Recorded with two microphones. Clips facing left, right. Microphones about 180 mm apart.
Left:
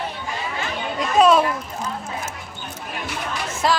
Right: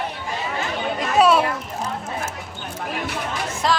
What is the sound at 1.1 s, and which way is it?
Speech, 5° right (ahead or behind).